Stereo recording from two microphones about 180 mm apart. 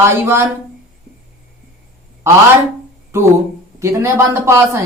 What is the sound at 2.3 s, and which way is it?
Speech, 15° right (ahead or behind).